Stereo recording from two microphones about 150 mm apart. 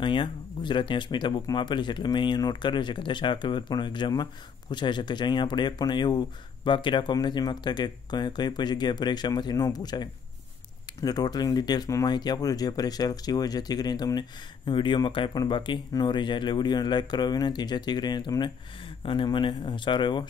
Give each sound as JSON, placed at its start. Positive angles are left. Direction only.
{"t": 0.0, "sound": "speech", "side_deg": 30}